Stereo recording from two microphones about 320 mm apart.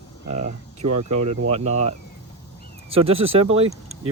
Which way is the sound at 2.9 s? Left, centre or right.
Centre.